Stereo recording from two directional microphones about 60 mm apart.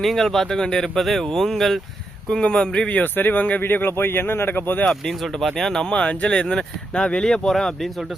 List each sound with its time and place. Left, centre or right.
0.0 s speech: centre
3.0 s speech: left
4.9 s speech: centre